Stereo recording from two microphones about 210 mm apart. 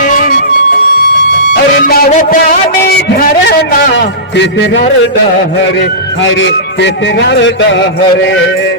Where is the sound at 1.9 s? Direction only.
45° left (ahead or behind).